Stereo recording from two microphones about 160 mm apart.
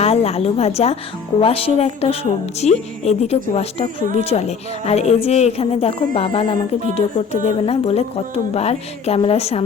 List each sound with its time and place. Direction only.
0.0 s a woman's voice: 40° left (ahead or behind)